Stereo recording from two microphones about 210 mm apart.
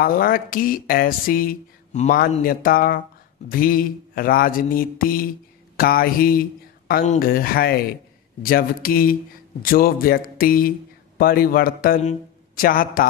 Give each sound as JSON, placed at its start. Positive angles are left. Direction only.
{"t": 0.0, "sound": "speech", "side_deg": 45}